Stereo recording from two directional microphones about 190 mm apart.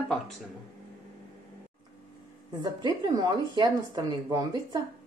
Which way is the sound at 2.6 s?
20° right (ahead or behind).